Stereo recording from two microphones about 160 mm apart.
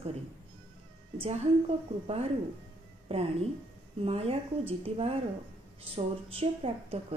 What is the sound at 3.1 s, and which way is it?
A woman's voice, 35° right (ahead or behind).